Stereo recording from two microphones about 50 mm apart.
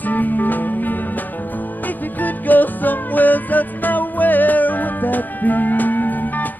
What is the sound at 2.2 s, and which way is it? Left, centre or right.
Music, left.